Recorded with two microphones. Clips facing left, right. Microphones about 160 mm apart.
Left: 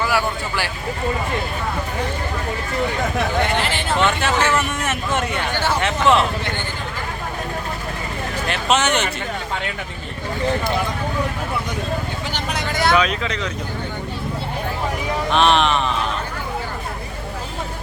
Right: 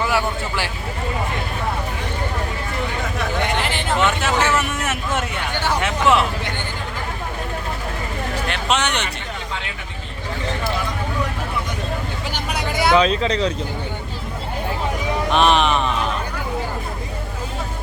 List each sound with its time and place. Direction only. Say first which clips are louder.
0.0 s speech: even; 25° right (ahead or behind)
3.6 s speech: even; 15° right (ahead or behind)
3.9 s speech: even; 5° right (ahead or behind)
8.4 s speech: left 4 dB; centre (ahead or behind)
12.3 s vehicle: right 1 dB; 10° right (ahead or behind)
13.0 s speech: right 4 dB; 30° right (ahead or behind)
15.3 s a sound: even; centre (ahead or behind)